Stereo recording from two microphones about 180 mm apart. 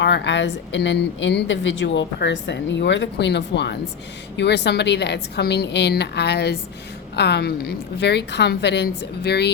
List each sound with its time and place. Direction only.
0.0 s a woman's voice: 80° left